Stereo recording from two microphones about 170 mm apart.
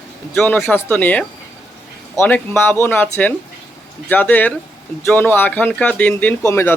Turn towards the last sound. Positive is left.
turn(degrees=15)  # may be behind; listen again after turning